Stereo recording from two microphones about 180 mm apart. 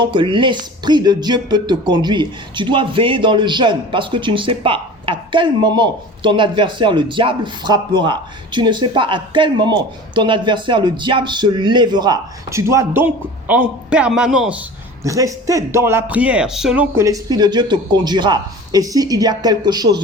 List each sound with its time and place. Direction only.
0.0 s speech: 25° right (ahead or behind); by 14.6 s 5° right (ahead or behind)
15.0 s speech: 20° right (ahead or behind)